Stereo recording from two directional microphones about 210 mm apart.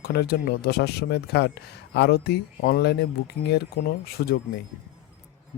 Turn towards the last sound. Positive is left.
turn(degrees=45)  # may be behind; listen again after turning